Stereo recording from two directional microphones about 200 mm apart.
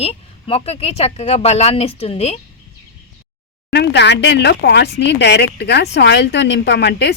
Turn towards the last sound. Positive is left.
turn(degrees=60)  # may be behind; listen again after turning